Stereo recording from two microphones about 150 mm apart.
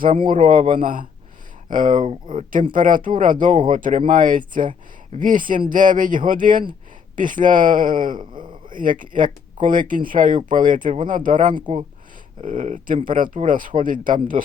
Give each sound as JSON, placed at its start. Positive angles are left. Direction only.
{"t": 0.3, "sound": "speech", "side_deg": -65}
{"t": 2.0, "sound": "speech", "side_deg": -35}
{"t": 2.7, "sound": "speech", "side_deg": -65}
{"t": 8.2, "sound": "speech", "side_deg": -30}
{"t": 8.7, "sound": "speech", "side_deg": -65}
{"t": 11.5, "sound": "speech", "side_deg": -35}
{"t": 12.4, "sound": "speech", "side_deg": -65}